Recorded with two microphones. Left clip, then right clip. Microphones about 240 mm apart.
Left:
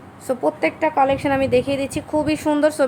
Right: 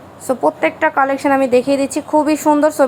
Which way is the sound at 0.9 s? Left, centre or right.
Right.